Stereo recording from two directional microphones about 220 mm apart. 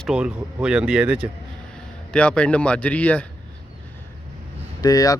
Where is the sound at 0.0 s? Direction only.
5° right (ahead or behind).